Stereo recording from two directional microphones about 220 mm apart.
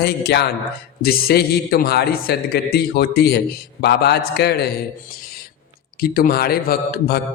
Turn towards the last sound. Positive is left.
turn(degrees=45)  # may be behind; listen again after turning